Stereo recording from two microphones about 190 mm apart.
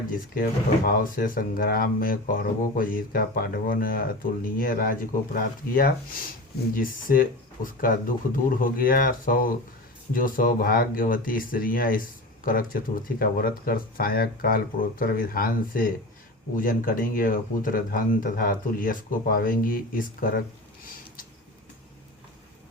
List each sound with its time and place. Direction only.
0.9 s speech: 50° left (ahead or behind)